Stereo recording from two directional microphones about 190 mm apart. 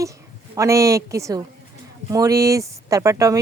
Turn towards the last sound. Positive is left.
turn(degrees=-15)  # may be behind; listen again after turning